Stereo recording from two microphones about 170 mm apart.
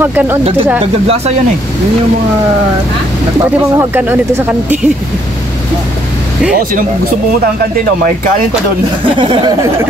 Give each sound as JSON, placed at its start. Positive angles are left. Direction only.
{"t": 0.0, "sound": "speech", "side_deg": -10}
{"t": 3.7, "sound": "speech", "side_deg": -10}
{"t": 9.2, "sound": "speech", "side_deg": -30}